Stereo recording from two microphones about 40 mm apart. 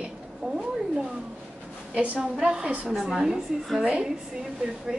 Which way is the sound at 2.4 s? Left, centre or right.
Right.